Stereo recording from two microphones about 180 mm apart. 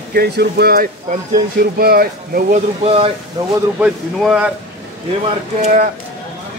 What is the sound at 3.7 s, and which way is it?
Speech, 5° right (ahead or behind).